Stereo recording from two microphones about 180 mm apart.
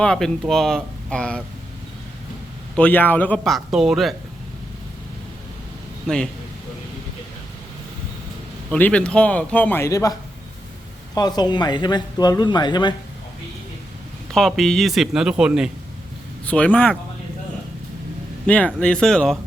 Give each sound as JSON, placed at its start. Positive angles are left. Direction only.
{"t": 0.0, "sound": "speech", "side_deg": 5}
{"t": 2.7, "sound": "speech", "side_deg": 10}
{"t": 8.7, "sound": "a man's voice", "side_deg": 5}
{"t": 14.3, "sound": "speech", "side_deg": 0}
{"t": 16.5, "sound": "a man's voice", "side_deg": 5}
{"t": 18.4, "sound": "speech", "side_deg": 5}